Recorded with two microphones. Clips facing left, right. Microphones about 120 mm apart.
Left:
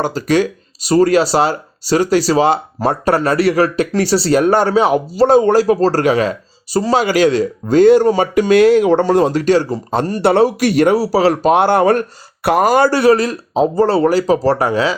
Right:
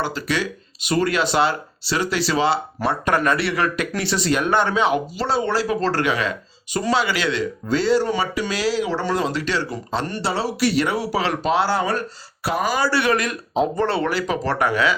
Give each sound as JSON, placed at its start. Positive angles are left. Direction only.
{"t": 0.0, "sound": "speech", "side_deg": 45}
{"t": 11.5, "sound": "speech", "side_deg": 55}
{"t": 12.9, "sound": "speech", "side_deg": 40}